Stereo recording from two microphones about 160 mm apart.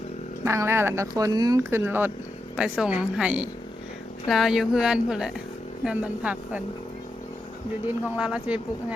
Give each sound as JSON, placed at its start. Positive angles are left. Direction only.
{"t": 0.4, "sound": "a woman's voice", "side_deg": -15}
{"t": 7.9, "sound": "speech", "side_deg": -5}